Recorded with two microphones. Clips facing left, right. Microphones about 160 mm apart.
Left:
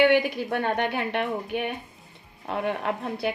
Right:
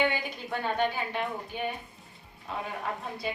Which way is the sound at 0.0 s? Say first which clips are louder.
Left 9 dB; 70° left (ahead or behind).